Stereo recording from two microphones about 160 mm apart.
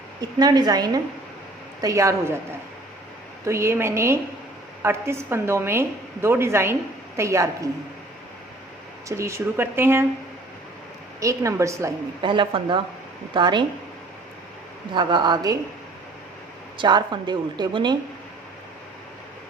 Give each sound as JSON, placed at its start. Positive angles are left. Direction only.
{"t": 0.2, "sound": "a woman's voice", "side_deg": -25}
{"t": 3.4, "sound": "a woman's voice", "side_deg": -15}
{"t": 9.0, "sound": "a woman's voice", "side_deg": -15}
{"t": 11.2, "sound": "a woman's voice", "side_deg": -20}
{"t": 12.2, "sound": "a woman's voice", "side_deg": -30}
{"t": 14.9, "sound": "a woman's voice", "side_deg": -25}
{"t": 16.7, "sound": "a woman's voice", "side_deg": -30}